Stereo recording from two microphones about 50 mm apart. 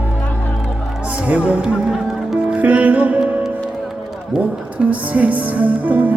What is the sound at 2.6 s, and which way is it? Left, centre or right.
Music, right.